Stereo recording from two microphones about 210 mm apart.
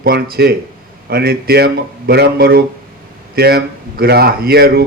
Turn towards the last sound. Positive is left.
turn(degrees=-50)  # may be behind; listen again after turning